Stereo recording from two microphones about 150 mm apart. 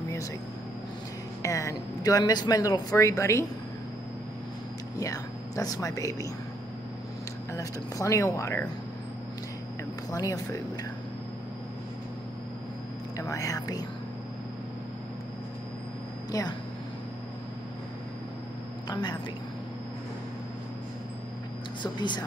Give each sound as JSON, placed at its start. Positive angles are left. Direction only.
{"t": 1.4, "sound": "speech", "side_deg": 20}
{"t": 4.9, "sound": "speech", "side_deg": 25}
{"t": 7.5, "sound": "speech", "side_deg": 20}
{"t": 10.1, "sound": "speech", "side_deg": 25}
{"t": 13.2, "sound": "speech", "side_deg": 20}
{"t": 16.3, "sound": "speech", "side_deg": 25}
{"t": 18.9, "sound": "speech", "side_deg": 30}